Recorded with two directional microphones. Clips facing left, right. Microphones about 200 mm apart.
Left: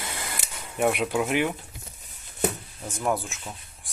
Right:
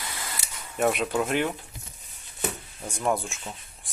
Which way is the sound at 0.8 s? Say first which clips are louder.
Left 1 dB; 10° left (ahead or behind).